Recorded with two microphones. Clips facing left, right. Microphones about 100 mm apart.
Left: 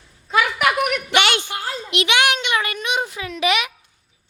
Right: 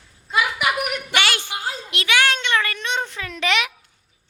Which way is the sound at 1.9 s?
20° left (ahead or behind).